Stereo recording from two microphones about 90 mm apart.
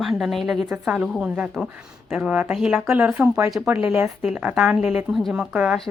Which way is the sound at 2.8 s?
25° right (ahead or behind).